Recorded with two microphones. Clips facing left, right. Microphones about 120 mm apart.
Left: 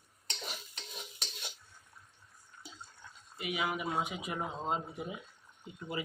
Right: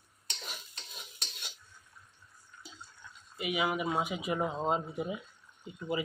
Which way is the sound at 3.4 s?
10° right (ahead or behind).